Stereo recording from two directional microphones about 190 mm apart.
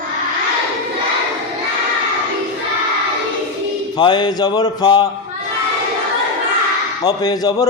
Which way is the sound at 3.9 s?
25° left (ahead or behind).